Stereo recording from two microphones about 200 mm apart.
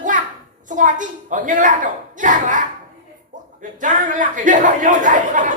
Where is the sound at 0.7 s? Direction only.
40° right (ahead or behind).